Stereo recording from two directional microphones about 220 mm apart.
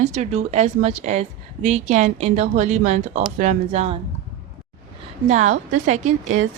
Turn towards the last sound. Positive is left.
turn(degrees=-70)  # may be behind; listen again after turning